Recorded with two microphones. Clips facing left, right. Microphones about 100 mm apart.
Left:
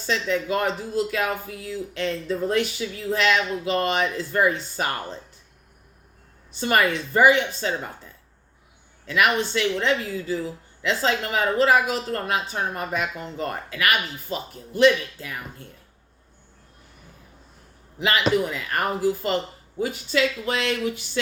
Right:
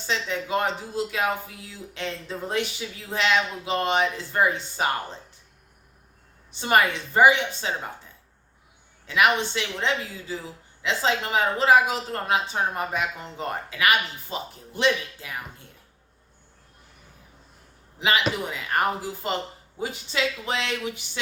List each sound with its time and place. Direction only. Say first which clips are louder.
0.0 s a woman's voice: left 4 dB; 20° right (ahead or behind)
6.5 s a woman's voice: even; 20° right (ahead or behind)
9.0 s a woman's voice: even; 20° right (ahead or behind)
18.4 s a woman's voice: right 1 dB; 20° right (ahead or behind)